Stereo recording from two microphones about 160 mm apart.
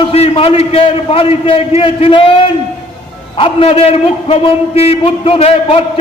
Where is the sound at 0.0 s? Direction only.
40° left (ahead or behind).